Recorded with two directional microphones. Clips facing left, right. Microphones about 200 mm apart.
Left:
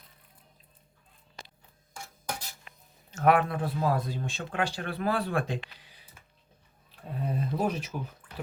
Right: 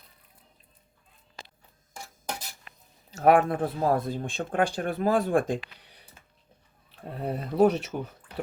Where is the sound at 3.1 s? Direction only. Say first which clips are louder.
Right 4 dB; 40° right (ahead or behind).